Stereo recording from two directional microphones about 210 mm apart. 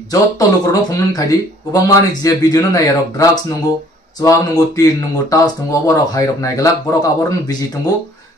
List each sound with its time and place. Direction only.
0.1 s speech: 15° left (ahead or behind)